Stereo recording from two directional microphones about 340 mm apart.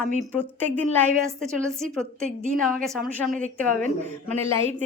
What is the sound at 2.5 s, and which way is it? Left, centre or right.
Speech, right.